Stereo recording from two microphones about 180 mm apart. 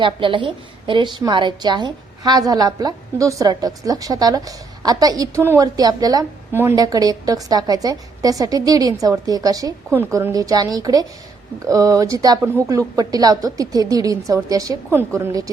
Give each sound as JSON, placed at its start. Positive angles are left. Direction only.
{"t": 0.0, "sound": "a woman's voice", "side_deg": -30}